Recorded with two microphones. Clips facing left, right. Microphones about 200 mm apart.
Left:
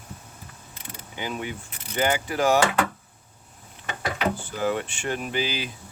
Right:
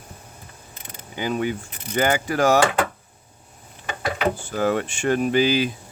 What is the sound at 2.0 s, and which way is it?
Speech, 45° right (ahead or behind).